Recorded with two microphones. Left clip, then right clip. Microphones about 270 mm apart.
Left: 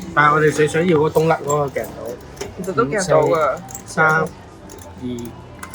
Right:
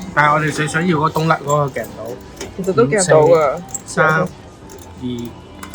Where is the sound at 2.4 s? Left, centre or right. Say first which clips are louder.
Right 5 dB; right.